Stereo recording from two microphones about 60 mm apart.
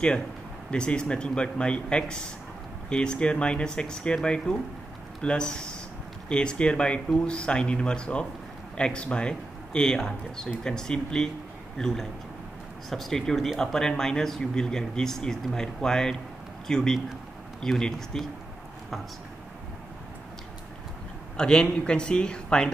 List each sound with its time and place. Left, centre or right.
0.7 s speech: centre
21.4 s speech: centre